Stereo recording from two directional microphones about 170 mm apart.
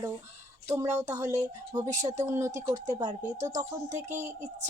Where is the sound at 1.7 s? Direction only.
20° right (ahead or behind).